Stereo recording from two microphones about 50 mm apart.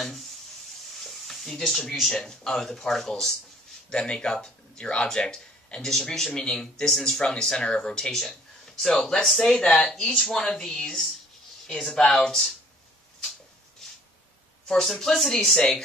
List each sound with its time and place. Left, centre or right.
0.0 s rub: centre
0.9 s speech: centre
3.9 s speech: centre
14.7 s speech: centre